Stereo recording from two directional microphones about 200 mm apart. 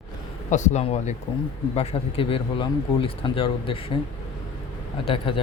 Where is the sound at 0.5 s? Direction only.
35° left (ahead or behind).